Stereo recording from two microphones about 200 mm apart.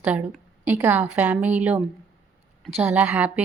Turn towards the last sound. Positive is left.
turn(degrees=-5)  # may be behind; listen again after turning